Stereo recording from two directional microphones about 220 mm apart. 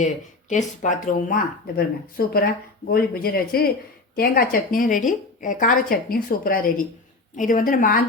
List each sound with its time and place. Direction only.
0.0 s speech: 35° left (ahead or behind)